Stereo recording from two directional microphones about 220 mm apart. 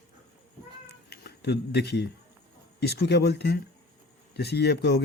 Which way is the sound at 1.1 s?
50° left (ahead or behind).